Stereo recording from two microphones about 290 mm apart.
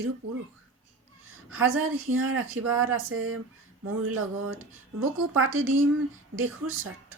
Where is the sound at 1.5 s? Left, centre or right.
Right.